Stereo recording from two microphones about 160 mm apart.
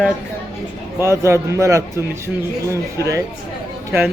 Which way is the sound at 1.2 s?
20° right (ahead or behind).